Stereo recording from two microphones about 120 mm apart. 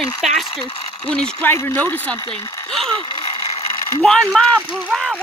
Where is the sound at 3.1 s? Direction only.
50° left (ahead or behind).